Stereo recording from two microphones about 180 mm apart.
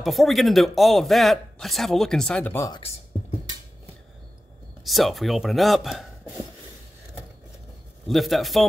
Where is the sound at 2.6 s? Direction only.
25° left (ahead or behind).